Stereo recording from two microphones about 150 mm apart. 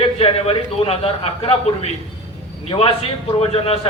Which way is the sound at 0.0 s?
40° left (ahead or behind).